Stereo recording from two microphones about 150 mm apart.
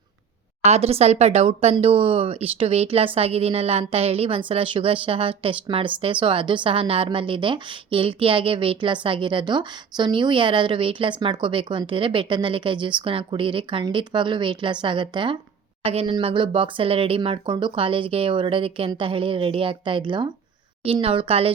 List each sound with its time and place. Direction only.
0.6 s a woman's voice: 45° right (ahead or behind)